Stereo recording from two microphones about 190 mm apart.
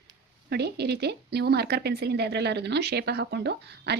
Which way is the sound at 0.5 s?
60° right (ahead or behind).